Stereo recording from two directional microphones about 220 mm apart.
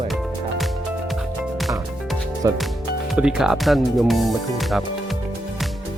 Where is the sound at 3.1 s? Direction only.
5° right (ahead or behind).